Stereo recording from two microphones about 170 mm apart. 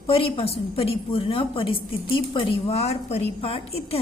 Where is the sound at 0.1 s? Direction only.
35° left (ahead or behind).